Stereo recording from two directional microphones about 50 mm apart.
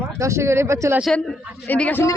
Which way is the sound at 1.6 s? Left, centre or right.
Left.